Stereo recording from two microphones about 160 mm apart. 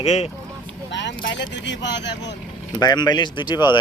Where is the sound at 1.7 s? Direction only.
90° left.